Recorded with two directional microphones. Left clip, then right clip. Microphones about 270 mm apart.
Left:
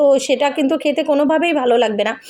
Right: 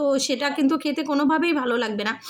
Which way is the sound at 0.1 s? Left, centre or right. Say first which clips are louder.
Left 8 dB; right.